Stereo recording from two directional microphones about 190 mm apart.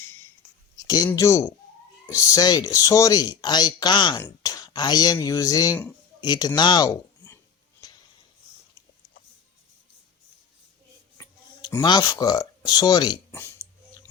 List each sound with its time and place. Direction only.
0.8 s speech: 20° left (ahead or behind)
7.8 s a sound: 20° left (ahead or behind)
11.2 s speech: 20° left (ahead or behind)
13.3 s burping: 10° left (ahead or behind)